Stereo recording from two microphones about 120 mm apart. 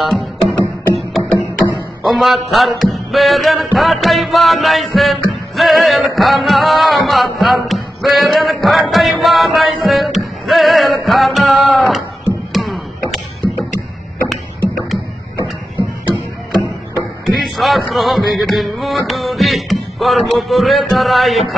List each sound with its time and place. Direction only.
0.0 s music: centre (ahead or behind)
17.3 s music: centre (ahead or behind)